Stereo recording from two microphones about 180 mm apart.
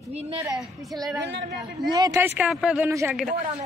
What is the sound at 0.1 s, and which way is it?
Speech, 35° right (ahead or behind).